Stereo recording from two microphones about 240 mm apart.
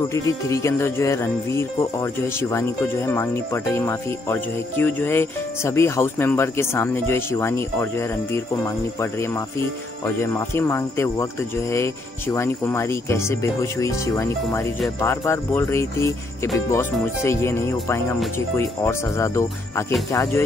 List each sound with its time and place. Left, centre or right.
0.1 s speech: centre
10.0 s speech: centre